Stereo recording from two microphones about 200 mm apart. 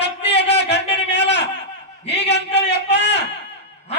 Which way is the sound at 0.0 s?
60° left (ahead or behind).